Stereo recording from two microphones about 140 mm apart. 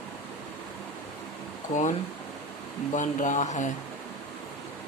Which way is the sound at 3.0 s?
60° left (ahead or behind).